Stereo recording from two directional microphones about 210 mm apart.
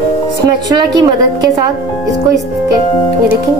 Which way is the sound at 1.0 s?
15° right (ahead or behind).